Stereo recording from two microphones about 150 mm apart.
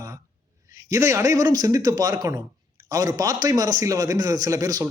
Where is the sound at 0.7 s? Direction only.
20° right (ahead or behind).